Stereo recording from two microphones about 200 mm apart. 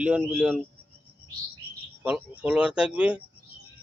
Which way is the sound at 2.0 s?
5° right (ahead or behind).